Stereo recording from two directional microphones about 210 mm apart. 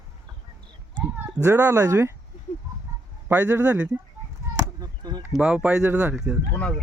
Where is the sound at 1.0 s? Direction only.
15° right (ahead or behind).